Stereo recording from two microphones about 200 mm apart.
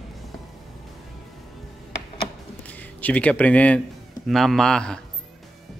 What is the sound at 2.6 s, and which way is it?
Speech, 10° left (ahead or behind).